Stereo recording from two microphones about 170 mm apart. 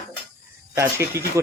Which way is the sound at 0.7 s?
15° right (ahead or behind).